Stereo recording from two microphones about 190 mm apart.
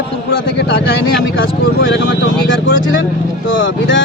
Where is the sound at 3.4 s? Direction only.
80° left.